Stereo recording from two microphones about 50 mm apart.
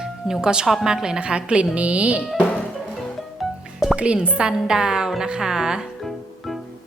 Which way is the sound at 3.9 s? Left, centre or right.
Right.